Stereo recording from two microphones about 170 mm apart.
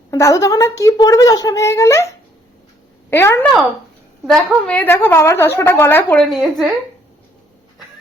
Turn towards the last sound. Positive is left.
turn(degrees=0)  # may be behind; listen again after turning